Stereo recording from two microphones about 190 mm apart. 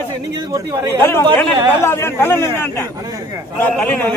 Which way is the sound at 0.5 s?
15° right (ahead or behind).